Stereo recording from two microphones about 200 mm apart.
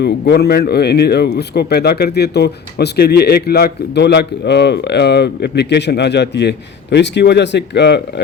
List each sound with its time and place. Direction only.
0.0 s speech: 55° left (ahead or behind)